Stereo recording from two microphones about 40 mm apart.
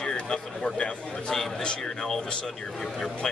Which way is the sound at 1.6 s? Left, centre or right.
Centre.